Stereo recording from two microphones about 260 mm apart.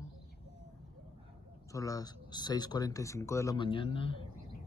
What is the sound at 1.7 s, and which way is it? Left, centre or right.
Speech, centre.